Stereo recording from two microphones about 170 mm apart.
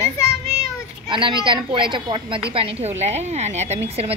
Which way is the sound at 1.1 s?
30° right (ahead or behind).